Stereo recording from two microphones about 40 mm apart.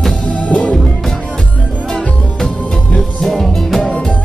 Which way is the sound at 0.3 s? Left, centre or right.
Left.